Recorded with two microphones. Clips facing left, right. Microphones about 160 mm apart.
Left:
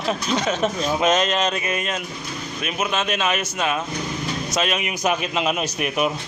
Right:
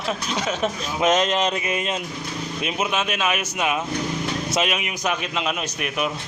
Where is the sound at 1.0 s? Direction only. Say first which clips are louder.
Right 2 dB; 20° right (ahead or behind).